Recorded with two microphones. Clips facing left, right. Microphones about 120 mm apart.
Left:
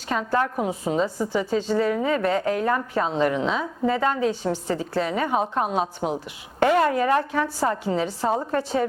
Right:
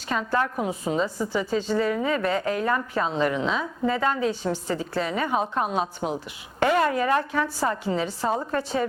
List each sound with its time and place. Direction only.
0.1 s a woman's voice: 40° left (ahead or behind)
4.4 s a woman's voice: 30° left (ahead or behind)
4.8 s a woman's voice: 45° left (ahead or behind)
6.0 s speech: 10° left (ahead or behind)
6.6 s a woman's voice: 50° left (ahead or behind)